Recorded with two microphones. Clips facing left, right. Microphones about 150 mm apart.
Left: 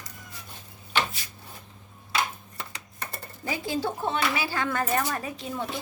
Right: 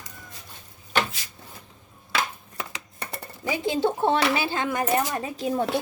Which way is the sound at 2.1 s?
90° right.